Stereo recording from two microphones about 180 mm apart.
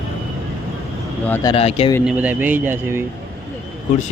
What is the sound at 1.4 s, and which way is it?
Speech, 30° left (ahead or behind).